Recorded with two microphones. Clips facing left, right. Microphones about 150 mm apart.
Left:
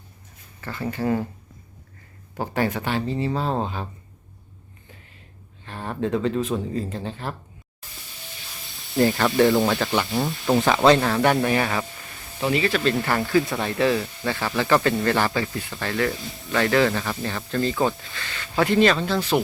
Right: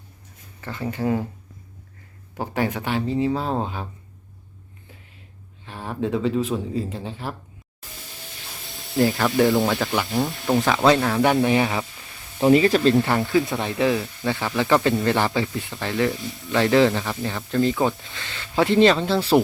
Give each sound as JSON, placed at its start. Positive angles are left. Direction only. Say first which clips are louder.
{"t": 0.6, "sound": "speech", "louder": "even", "side_deg": -15}
{"t": 2.3, "sound": "speech", "louder": "even", "side_deg": -10}
{"t": 5.6, "sound": "speech", "louder": "even", "side_deg": -10}
{"t": 8.6, "sound": "speech", "louder": "even", "side_deg": 0}
{"t": 12.4, "sound": "speech", "louder": "right 7 dB", "side_deg": -40}
{"t": 12.9, "sound": "speech", "louder": "right 4 dB", "side_deg": -20}
{"t": 13.1, "sound": "speech", "louder": "right 1 dB", "side_deg": 0}
{"t": 14.6, "sound": "speech", "louder": "right 1 dB", "side_deg": -15}
{"t": 16.1, "sound": "speech", "louder": "right 3 dB", "side_deg": 0}
{"t": 16.5, "sound": "speech", "louder": "right 3 dB", "side_deg": -20}
{"t": 17.7, "sound": "speech", "louder": "right 1 dB", "side_deg": 0}
{"t": 18.0, "sound": "speech", "louder": "left 1 dB", "side_deg": -20}